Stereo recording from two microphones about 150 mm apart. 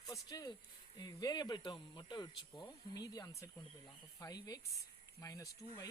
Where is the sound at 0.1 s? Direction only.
25° left (ahead or behind).